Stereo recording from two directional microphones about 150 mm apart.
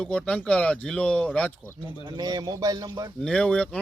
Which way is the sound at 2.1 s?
25° right (ahead or behind).